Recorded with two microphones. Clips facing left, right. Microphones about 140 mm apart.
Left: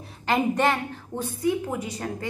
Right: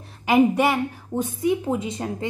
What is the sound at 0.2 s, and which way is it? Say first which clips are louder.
A woman's voice: right 5 dB; 10° right (ahead or behind).